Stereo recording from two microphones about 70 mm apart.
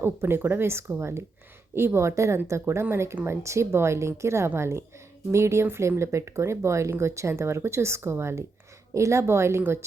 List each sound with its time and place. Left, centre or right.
0.0 s speech: right